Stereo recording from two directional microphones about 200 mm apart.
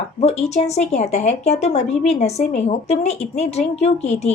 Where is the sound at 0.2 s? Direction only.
30° left (ahead or behind).